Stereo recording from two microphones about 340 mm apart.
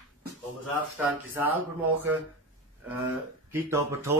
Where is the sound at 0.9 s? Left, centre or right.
Centre.